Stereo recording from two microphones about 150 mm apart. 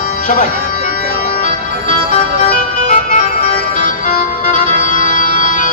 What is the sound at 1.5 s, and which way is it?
Music, 50° left (ahead or behind).